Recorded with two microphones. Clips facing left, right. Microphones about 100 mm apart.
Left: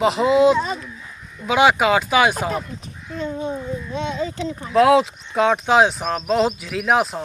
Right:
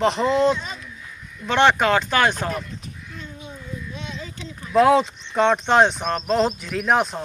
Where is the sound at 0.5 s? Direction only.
40° left (ahead or behind).